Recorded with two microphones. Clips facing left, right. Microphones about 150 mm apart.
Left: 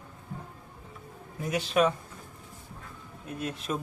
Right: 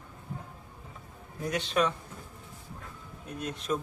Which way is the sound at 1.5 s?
5° left (ahead or behind).